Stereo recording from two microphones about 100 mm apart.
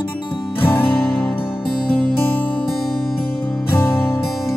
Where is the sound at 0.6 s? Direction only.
20° left (ahead or behind).